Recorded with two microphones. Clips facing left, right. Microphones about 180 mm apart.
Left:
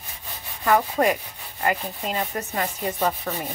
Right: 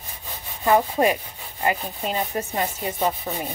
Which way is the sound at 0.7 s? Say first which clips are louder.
Right 1 dB; 20° right (ahead or behind).